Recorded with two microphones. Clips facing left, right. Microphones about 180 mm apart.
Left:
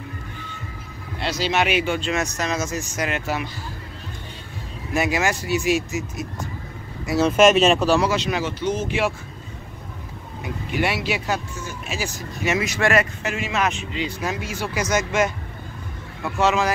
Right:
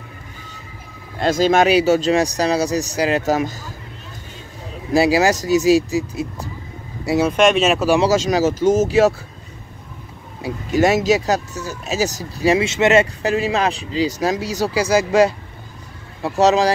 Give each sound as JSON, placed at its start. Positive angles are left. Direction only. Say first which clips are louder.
{"t": 1.2, "sound": "speech", "louder": "right 8 dB", "side_deg": -45}
{"t": 4.9, "sound": "speech", "louder": "right 7 dB", "side_deg": -35}
{"t": 7.3, "sound": "speech", "louder": "left 2 dB", "side_deg": 0}
{"t": 8.1, "sound": "speech", "louder": "right 7 dB", "side_deg": -40}
{"t": 10.4, "sound": "speech", "louder": "right 8 dB", "side_deg": -40}